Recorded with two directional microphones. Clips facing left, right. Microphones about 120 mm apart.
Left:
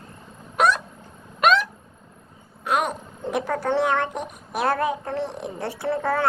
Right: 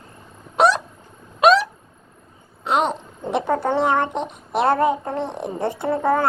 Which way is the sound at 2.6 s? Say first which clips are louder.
Right 3 dB; 25° right (ahead or behind).